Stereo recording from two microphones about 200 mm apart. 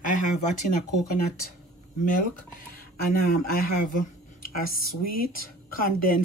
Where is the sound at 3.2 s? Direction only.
45° left (ahead or behind).